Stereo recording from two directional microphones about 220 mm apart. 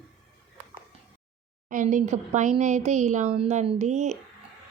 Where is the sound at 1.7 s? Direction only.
35° right (ahead or behind).